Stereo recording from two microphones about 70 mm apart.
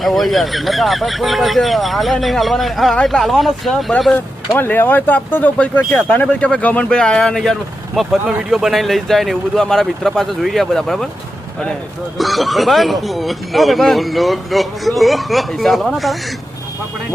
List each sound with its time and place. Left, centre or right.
0.0 s speech: centre
4.5 s speech: left; by 11.1 s centre
12.1 s speech: centre